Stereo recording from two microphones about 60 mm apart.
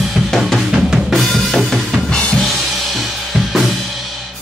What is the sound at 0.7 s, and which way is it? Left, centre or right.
Drum kit, centre.